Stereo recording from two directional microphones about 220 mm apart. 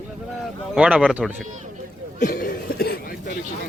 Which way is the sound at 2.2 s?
40° left (ahead or behind).